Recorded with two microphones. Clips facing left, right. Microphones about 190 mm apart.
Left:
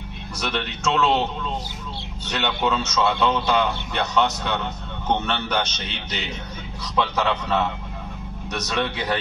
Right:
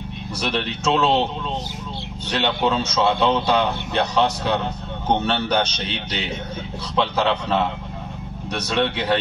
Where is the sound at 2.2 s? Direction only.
30° right (ahead or behind).